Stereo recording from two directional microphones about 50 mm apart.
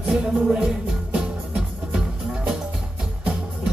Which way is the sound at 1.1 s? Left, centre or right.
Centre.